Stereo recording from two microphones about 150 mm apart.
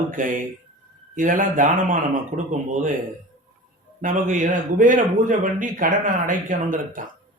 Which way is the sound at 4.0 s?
60° right (ahead or behind).